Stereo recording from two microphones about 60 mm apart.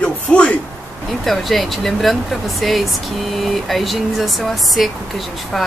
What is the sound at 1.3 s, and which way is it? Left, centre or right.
Speech, centre.